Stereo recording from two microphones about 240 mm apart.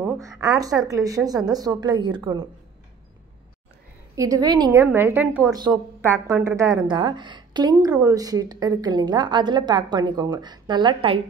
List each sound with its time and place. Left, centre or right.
0.0 s a woman's voice: centre
4.1 s a woman's voice: centre